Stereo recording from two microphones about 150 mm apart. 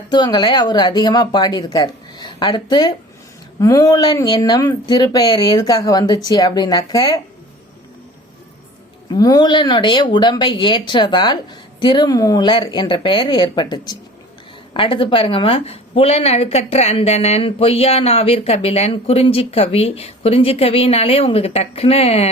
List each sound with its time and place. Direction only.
0.1 s speech: 30° left (ahead or behind)
9.0 s a woman's voice: 25° left (ahead or behind); by 22.3 s 40° left (ahead or behind)